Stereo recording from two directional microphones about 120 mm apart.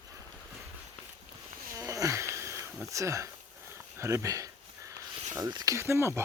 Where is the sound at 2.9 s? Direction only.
25° right (ahead or behind).